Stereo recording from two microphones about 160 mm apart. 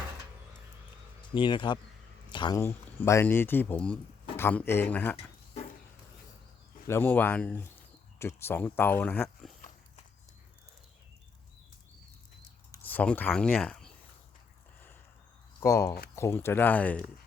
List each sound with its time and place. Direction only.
1.3 s speech: 30° left (ahead or behind)
2.6 s speech: 15° left (ahead or behind)
6.8 s speech: 15° left (ahead or behind)
12.7 s speech: 10° left (ahead or behind)
15.6 s speech: 20° left (ahead or behind)